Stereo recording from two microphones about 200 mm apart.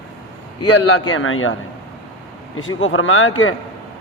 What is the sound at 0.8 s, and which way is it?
Speech, 90° left.